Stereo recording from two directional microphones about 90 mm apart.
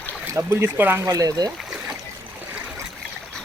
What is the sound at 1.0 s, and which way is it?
Speech, 40° right (ahead or behind).